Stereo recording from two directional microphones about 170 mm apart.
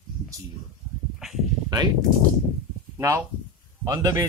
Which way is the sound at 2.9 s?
20° right (ahead or behind).